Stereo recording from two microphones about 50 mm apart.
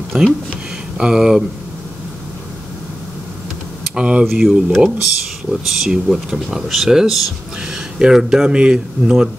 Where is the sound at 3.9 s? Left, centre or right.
Right.